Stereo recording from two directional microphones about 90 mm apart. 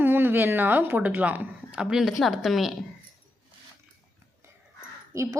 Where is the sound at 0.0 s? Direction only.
25° right (ahead or behind); by 2.7 s centre (ahead or behind).